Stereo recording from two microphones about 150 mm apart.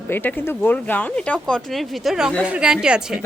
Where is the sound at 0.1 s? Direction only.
15° left (ahead or behind); by 3.2 s 5° right (ahead or behind).